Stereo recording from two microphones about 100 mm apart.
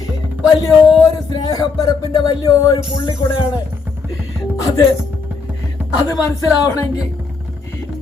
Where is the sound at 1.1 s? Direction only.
45° left (ahead or behind).